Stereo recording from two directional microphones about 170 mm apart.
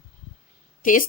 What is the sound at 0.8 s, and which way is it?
Speech, 55° left (ahead or behind).